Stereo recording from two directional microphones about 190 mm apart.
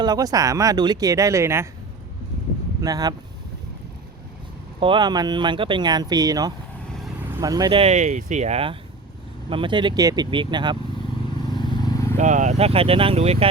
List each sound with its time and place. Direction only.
0.0 s speech: 20° right (ahead or behind)
2.8 s speech: 20° right (ahead or behind)
4.8 s speech: 25° right (ahead or behind)
11.4 s vehicle: 25° left (ahead or behind)
12.1 s speech: 40° right (ahead or behind)